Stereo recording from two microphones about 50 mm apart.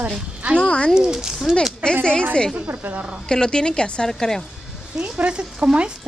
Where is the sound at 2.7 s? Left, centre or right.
Right.